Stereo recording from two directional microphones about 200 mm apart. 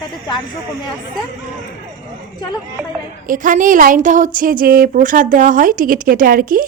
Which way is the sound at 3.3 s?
40° right (ahead or behind).